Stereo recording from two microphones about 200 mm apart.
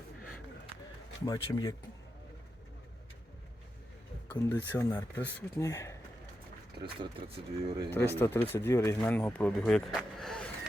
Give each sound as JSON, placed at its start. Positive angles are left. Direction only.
{"t": 1.2, "sound": "speech", "side_deg": 20}
{"t": 4.3, "sound": "speech", "side_deg": 10}
{"t": 6.8, "sound": "speech", "side_deg": -25}
{"t": 7.9, "sound": "speech", "side_deg": 10}